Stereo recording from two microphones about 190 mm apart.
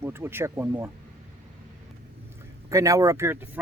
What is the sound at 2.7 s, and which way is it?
Speech, 15° right (ahead or behind).